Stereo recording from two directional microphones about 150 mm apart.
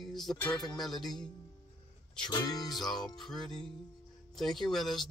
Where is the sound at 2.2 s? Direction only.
25° left (ahead or behind).